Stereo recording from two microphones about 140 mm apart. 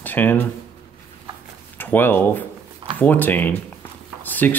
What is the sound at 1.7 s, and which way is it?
Speech, 15° left (ahead or behind).